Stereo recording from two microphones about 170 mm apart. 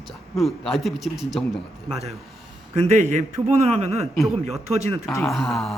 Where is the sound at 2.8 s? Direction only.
40° right (ahead or behind).